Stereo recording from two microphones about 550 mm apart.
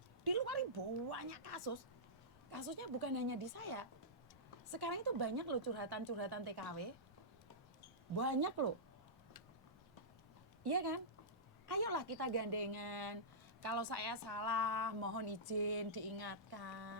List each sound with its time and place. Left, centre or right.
0.3 s a woman's voice: right
8.1 s a woman's voice: right
10.6 s a woman's voice: right